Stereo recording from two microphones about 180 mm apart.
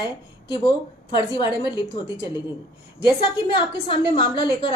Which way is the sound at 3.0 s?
25° left (ahead or behind).